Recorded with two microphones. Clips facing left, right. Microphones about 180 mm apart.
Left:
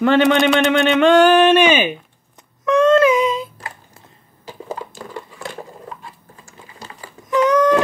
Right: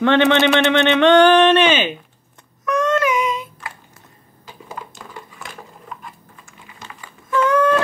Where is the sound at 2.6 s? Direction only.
30° left (ahead or behind).